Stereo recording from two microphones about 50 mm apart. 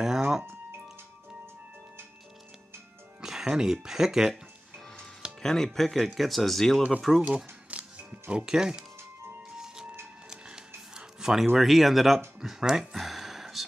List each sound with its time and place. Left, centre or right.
0.0 s music: centre
3.2 s speech: centre
5.4 s speech: centre
7.7 s music: right
10.3 s a sound: centre
11.0 s music: centre
11.5 s speech: centre